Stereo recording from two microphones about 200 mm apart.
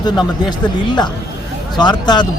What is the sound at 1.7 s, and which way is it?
Speech, 20° left (ahead or behind).